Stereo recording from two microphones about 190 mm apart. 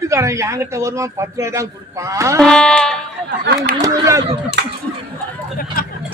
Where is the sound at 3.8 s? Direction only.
15° right (ahead or behind).